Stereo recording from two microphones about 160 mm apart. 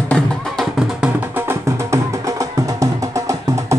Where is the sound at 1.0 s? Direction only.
15° right (ahead or behind).